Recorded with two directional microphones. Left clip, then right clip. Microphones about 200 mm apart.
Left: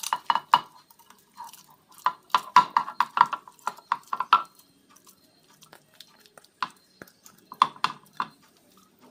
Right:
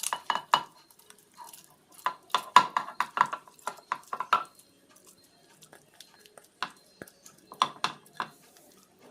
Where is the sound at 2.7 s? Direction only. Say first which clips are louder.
Left 6 dB; 5° left (ahead or behind).